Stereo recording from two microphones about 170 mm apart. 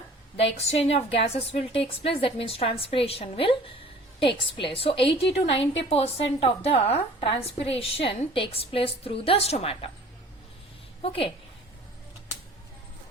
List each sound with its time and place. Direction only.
0.5 s a woman's voice: 40° left (ahead or behind)
11.0 s a woman's voice: 35° left (ahead or behind)